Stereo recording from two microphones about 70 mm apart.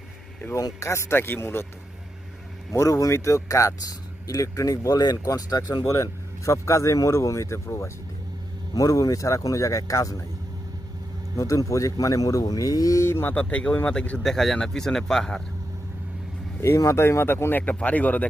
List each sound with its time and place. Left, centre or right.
0.5 s speech: left
2.7 s speech: left
5.2 s speech: left
5.8 s speech: left
8.7 s speech: left
11.3 s speech: left
13.1 s speech: left
13.3 s speech: centre
14.2 s speech: centre
16.6 s speech: left
17.6 s speech: centre